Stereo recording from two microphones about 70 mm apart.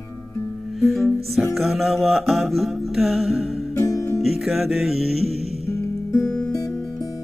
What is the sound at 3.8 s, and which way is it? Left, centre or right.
Music, left.